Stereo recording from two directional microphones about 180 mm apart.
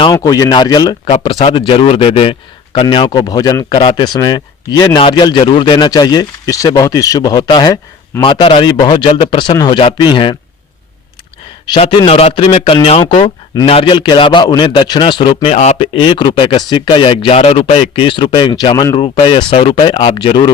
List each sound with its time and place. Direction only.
0.0 s speech: 20° left (ahead or behind)
11.6 s speech: 25° left (ahead or behind)